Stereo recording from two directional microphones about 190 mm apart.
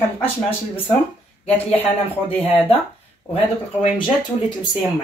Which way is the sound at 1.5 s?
10° left (ahead or behind).